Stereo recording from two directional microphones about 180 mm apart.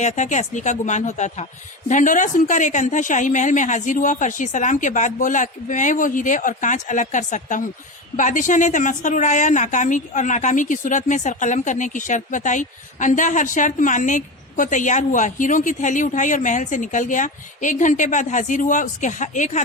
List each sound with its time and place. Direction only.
0.0 s a woman's voice: 40° left (ahead or behind)